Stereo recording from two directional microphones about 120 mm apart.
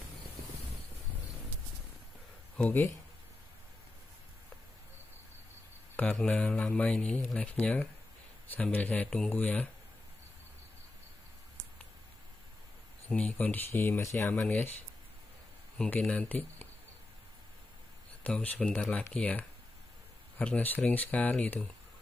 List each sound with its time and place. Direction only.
2.5 s speech: 15° left (ahead or behind)
5.9 s speech: 10° left (ahead or behind)
13.1 s speech: 10° left (ahead or behind)
15.8 s speech: 10° left (ahead or behind)
18.2 s speech: 10° left (ahead or behind)